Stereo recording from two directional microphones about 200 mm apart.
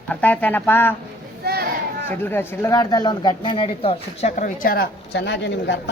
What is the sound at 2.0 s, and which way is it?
Speech, 10° left (ahead or behind).